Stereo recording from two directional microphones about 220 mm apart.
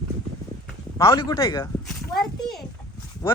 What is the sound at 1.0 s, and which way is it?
Speech, 15° left (ahead or behind).